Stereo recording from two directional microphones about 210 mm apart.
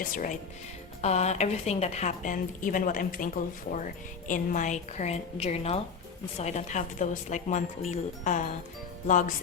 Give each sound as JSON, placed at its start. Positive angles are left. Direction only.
{"t": 1.0, "sound": "a woman's voice", "side_deg": 30}